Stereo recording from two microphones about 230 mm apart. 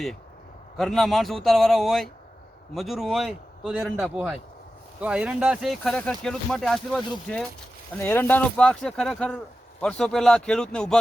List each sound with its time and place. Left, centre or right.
0.8 s speech: centre